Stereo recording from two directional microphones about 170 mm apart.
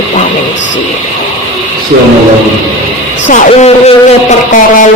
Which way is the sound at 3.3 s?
40° left (ahead or behind).